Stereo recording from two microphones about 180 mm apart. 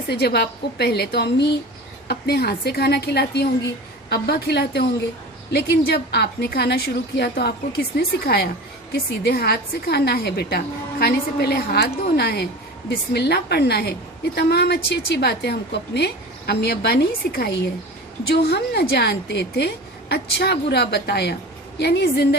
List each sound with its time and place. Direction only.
0.1 s a woman's voice: 65° left (ahead or behind)